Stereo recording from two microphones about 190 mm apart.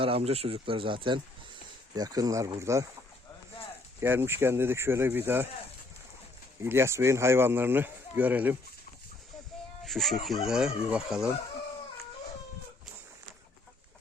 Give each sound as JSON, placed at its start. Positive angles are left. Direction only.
{"t": 0.0, "sound": "speech", "side_deg": -30}
{"t": 4.0, "sound": "speech", "side_deg": -10}
{"t": 6.6, "sound": "speech", "side_deg": -15}
{"t": 9.8, "sound": "speech", "side_deg": 0}